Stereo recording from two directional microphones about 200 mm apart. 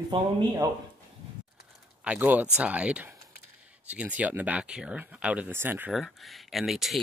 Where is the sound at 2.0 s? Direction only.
5° right (ahead or behind).